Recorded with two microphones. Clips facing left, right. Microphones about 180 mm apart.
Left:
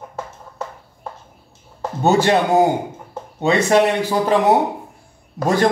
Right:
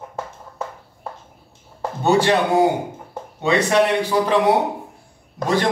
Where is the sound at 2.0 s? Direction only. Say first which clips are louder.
Left 1 dB; 45° left (ahead or behind).